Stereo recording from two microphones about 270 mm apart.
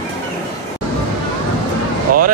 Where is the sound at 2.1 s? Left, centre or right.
Right.